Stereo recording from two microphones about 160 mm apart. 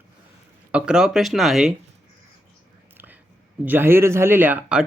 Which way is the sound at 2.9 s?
10° right (ahead or behind).